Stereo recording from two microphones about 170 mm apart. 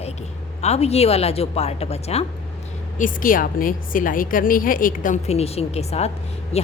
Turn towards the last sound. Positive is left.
turn(degrees=40)  # may be behind; listen again after turning